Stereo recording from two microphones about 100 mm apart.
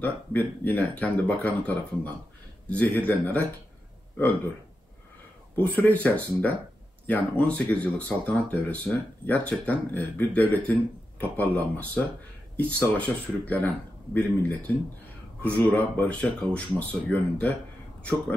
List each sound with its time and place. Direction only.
0.0 s speech: 15° left (ahead or behind)
5.6 s speech: 15° left (ahead or behind)
15.4 s speech: 15° left (ahead or behind)